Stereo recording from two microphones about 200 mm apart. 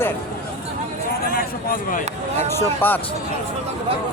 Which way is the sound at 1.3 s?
45° left (ahead or behind).